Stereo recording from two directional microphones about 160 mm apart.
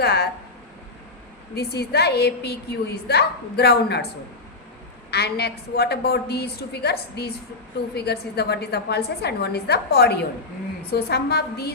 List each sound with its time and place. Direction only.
0.0 s a sound: 85° left
1.5 s a woman's voice: 80° left
5.1 s a woman's voice: 90° left